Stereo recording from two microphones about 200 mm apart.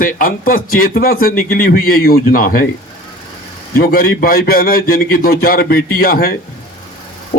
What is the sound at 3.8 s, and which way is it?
A man's voice, 45° left (ahead or behind).